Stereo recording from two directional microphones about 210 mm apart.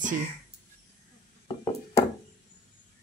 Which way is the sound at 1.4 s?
15° left (ahead or behind).